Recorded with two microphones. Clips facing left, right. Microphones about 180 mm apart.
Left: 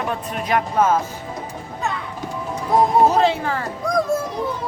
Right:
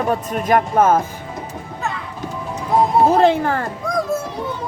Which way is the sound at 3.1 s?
55° right (ahead or behind).